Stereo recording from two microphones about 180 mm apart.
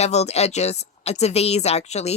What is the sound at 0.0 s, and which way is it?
A woman's voice, 35° left (ahead or behind).